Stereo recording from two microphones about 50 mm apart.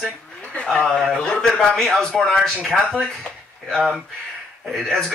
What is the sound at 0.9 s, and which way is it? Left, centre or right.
Speech, centre.